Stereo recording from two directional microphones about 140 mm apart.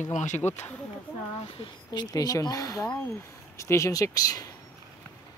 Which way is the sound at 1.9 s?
30° left (ahead or behind).